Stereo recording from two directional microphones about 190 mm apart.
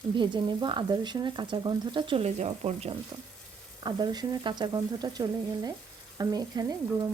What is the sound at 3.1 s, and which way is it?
Speech, 20° right (ahead or behind).